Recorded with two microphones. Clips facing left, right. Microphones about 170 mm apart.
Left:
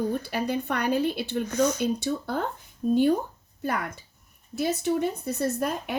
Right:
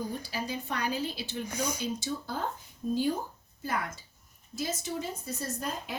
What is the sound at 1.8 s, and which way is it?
A woman's voice, 60° left (ahead or behind).